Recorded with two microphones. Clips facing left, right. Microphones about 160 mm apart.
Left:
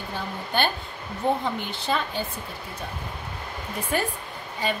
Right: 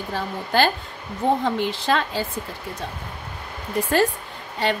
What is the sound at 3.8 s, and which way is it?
Speech, 90° right.